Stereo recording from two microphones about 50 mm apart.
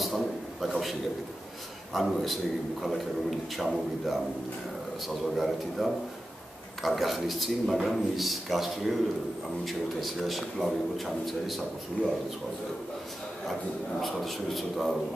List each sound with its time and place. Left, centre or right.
0.0 s a sound: centre
2.0 s a man's voice: centre
12.0 s a man's voice: left
13.5 s a man's voice: centre